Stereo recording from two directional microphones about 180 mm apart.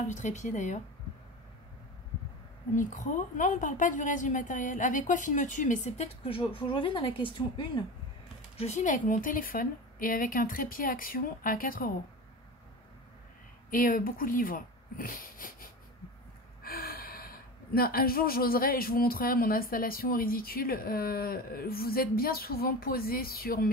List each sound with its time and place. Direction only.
0.0 s a woman's voice: 40° left (ahead or behind)
2.7 s a woman's voice: 45° left (ahead or behind); by 7.8 s 25° left (ahead or behind)
8.5 s a woman's voice: 40° left (ahead or behind)
13.7 s a woman's voice: 50° left (ahead or behind)